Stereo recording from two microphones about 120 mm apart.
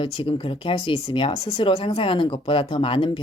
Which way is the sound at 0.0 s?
45° left (ahead or behind).